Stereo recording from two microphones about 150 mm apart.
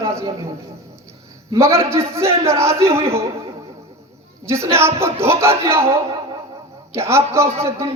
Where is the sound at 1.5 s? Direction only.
20° right (ahead or behind).